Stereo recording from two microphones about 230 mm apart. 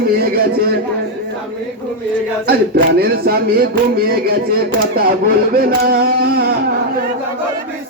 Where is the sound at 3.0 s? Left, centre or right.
Right.